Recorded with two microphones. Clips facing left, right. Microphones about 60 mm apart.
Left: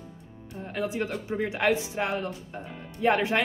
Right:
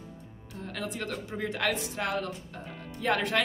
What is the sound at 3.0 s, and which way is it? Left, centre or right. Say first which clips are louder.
Speech: left 4 dB; left.